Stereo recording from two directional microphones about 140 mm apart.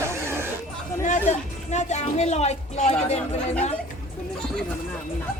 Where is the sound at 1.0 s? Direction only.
55° left (ahead or behind).